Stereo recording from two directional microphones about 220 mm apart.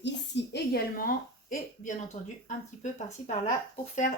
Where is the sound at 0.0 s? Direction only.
55° left (ahead or behind); by 2.0 s 35° left (ahead or behind).